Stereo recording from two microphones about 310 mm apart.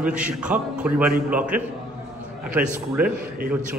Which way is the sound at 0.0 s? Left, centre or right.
Centre.